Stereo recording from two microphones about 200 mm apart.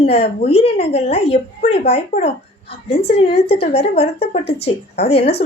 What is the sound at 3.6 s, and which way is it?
A woman's voice, 30° left (ahead or behind).